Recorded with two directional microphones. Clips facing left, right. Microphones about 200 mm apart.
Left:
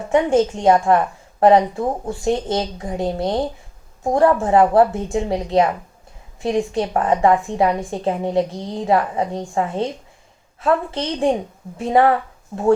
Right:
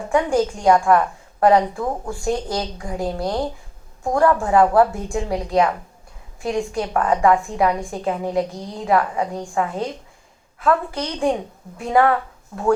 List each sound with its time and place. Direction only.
0.1 s a woman's voice: 25° left (ahead or behind)